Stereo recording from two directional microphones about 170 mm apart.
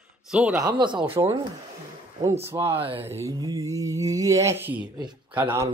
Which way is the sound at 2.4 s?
15° right (ahead or behind).